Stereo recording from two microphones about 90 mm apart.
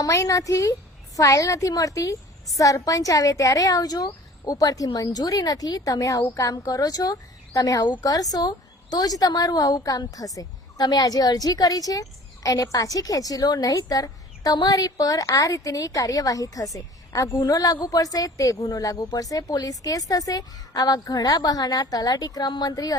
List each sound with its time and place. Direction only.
0.0 s a woman's voice: 35° left (ahead or behind)